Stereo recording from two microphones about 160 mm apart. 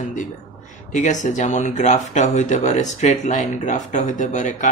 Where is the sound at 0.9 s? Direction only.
50° left (ahead or behind).